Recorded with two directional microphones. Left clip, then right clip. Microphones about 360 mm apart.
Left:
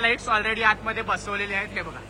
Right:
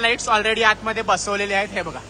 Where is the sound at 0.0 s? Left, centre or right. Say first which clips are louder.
Right 4 dB; centre.